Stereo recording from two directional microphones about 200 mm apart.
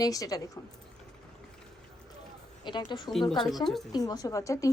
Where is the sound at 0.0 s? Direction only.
15° left (ahead or behind).